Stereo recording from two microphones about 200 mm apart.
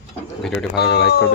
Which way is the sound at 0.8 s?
55° left (ahead or behind).